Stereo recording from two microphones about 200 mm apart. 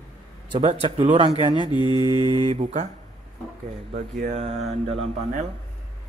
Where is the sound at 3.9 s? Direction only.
30° right (ahead or behind).